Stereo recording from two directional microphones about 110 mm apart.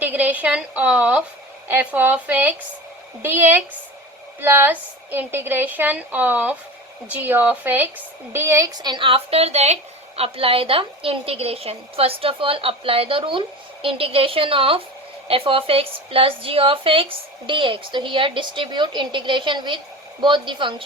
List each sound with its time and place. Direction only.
0.0 s a sound: 15° right (ahead or behind)
1.6 s a woman's voice: 15° right (ahead or behind)
8.8 s a woman's voice: 45° right (ahead or behind); by 9.7 s 80° right
10.2 s a woman's voice: 60° right (ahead or behind)